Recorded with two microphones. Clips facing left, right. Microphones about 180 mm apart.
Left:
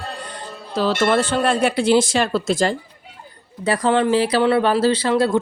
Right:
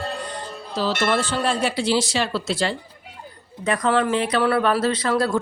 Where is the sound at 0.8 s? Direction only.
60° left (ahead or behind).